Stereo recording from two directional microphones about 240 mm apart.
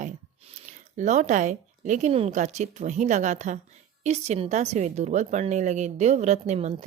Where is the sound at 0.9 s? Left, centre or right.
Right.